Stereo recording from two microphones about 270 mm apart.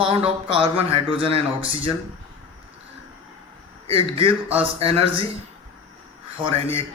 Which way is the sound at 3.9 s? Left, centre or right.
Right.